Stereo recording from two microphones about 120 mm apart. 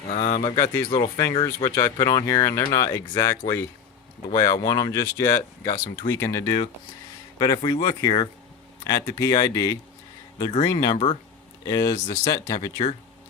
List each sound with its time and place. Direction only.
0.1 s speech: 70° left (ahead or behind)
0.4 s speech: 35° left (ahead or behind)
0.9 s speech: 45° left (ahead or behind)
1.5 s speech: 25° left (ahead or behind)
7.3 s speech: 35° left (ahead or behind)
10.9 s speech: 50° left (ahead or behind)
11.6 s speech: 30° left (ahead or behind)